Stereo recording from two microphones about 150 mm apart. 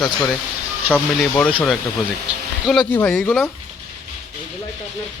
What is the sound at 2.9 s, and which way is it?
Speech, 10° left (ahead or behind).